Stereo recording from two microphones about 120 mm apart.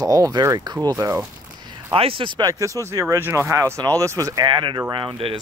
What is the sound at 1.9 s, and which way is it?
Speech, 50° right (ahead or behind).